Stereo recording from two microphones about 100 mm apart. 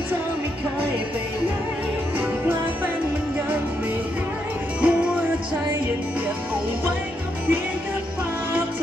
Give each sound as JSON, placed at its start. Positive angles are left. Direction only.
{"t": 2.1, "sound": "music", "side_deg": -15}
{"t": 4.8, "sound": "music", "side_deg": -15}